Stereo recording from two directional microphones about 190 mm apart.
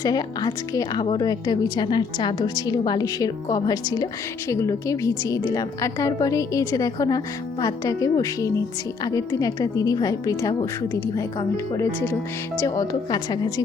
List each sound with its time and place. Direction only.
0.0 s a woman's voice: 20° left (ahead or behind)